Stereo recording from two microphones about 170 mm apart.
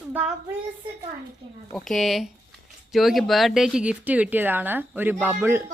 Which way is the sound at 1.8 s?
Centre (ahead or behind).